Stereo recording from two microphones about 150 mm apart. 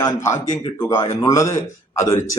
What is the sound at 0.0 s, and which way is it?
A man's voice, 20° left (ahead or behind).